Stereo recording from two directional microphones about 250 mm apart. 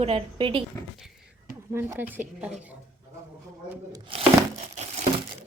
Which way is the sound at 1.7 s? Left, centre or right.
Centre.